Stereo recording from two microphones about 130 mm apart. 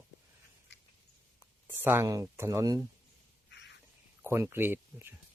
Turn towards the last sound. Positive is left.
turn(degrees=-15)  # may be behind; listen again after turning